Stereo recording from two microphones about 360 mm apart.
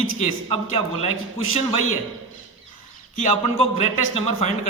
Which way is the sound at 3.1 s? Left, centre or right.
Centre.